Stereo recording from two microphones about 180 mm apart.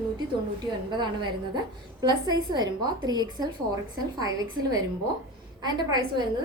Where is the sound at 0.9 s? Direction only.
25° right (ahead or behind).